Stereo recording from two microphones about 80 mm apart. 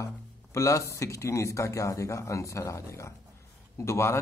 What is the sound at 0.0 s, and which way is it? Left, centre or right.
Speech, left.